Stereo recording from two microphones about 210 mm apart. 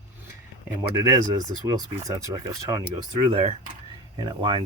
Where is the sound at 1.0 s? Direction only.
15° right (ahead or behind).